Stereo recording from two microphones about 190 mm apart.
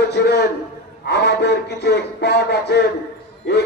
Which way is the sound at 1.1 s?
60° left (ahead or behind).